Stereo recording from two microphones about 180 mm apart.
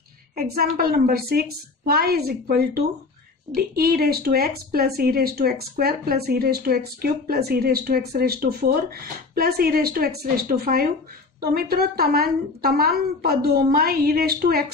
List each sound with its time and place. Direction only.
0.4 s speech: 55° right (ahead or behind)